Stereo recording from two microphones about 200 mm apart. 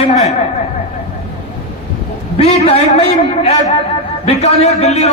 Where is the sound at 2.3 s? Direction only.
30° left (ahead or behind).